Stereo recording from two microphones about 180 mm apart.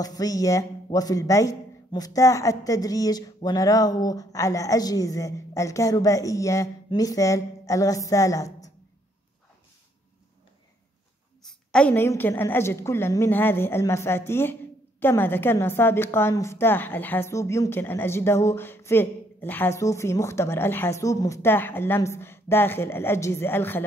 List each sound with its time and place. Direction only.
0.0 s a man's voice: 20° left (ahead or behind)
11.4 s a woman's voice: 5° left (ahead or behind)